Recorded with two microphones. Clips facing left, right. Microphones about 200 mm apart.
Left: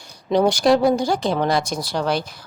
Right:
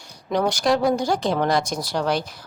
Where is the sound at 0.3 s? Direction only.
30° left (ahead or behind).